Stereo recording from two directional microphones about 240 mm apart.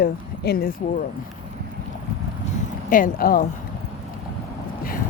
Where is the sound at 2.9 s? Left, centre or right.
Left.